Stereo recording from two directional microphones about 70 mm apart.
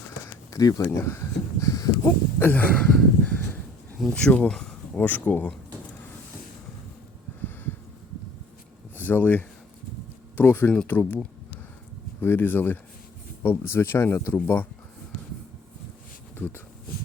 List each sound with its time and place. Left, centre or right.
0.5 s speech: left
2.4 s speech: left
2.7 s speech: centre
4.1 s speech: centre
4.9 s speech: left
9.0 s speech: left
12.2 s speech: left
16.4 s speech: left